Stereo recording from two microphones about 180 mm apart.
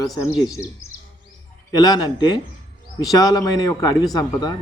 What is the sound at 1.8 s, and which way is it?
Speech, 20° left (ahead or behind).